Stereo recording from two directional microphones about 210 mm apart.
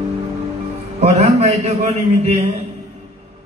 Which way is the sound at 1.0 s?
30° right (ahead or behind).